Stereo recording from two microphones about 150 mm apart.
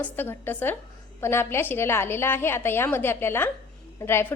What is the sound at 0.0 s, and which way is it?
A woman's voice, 15° left (ahead or behind).